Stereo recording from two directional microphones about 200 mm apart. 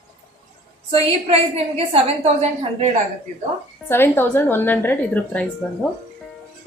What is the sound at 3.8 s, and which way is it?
Speech, 10° left (ahead or behind).